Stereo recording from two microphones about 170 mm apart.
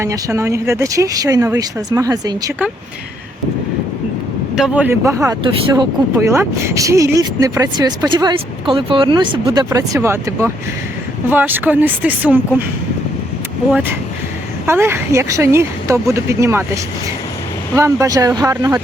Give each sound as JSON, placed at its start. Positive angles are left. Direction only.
{"t": 0.0, "sound": "speech", "side_deg": -15}
{"t": 4.5, "sound": "speech", "side_deg": -5}
{"t": 5.4, "sound": "speech", "side_deg": -30}
{"t": 6.1, "sound": "speech", "side_deg": -15}
{"t": 14.7, "sound": "speech", "side_deg": -15}
{"t": 18.0, "sound": "speech", "side_deg": -20}